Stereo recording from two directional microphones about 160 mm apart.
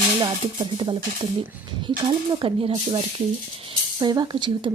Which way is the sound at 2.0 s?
35° right (ahead or behind).